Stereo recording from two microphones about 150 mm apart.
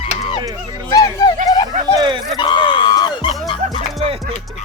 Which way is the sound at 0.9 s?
25° left (ahead or behind).